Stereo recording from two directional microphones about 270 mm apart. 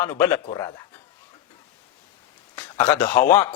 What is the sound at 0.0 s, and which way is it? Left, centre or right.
Speech, centre.